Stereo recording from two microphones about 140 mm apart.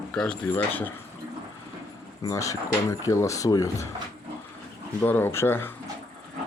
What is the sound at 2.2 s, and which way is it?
Speech, 25° left (ahead or behind).